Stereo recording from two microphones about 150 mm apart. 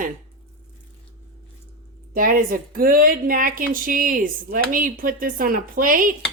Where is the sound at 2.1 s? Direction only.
70° right (ahead or behind).